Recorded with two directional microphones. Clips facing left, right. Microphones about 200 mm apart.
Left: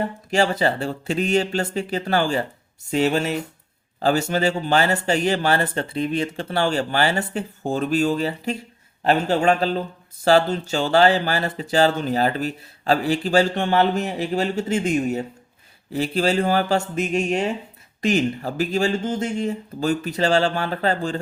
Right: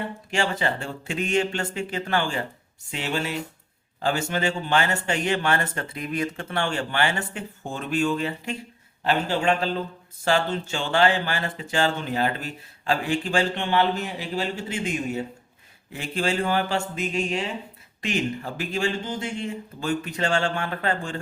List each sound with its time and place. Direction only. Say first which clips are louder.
0.0 s speech: left 6 dB; 40° left (ahead or behind)